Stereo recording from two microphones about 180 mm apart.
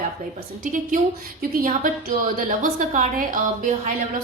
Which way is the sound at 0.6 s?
50° right (ahead or behind).